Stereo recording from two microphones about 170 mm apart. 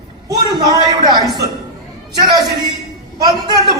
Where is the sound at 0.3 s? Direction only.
25° right (ahead or behind).